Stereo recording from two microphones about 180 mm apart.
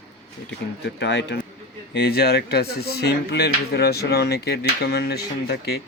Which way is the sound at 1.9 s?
60° left (ahead or behind).